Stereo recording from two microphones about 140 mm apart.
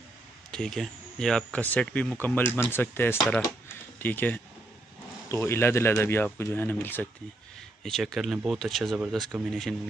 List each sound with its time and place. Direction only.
0.5 s speech: 5° left (ahead or behind)
7.8 s speech: centre (ahead or behind)